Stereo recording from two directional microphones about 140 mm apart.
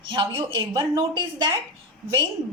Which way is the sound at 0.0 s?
35° right (ahead or behind).